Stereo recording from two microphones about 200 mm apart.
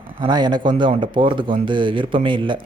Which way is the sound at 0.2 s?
20° right (ahead or behind).